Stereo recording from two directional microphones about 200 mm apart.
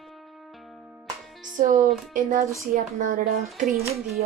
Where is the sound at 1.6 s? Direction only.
40° right (ahead or behind).